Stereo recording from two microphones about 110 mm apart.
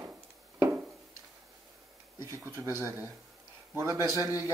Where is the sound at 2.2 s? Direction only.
20° right (ahead or behind).